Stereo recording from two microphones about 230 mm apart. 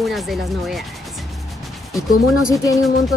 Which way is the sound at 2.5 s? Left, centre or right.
Centre.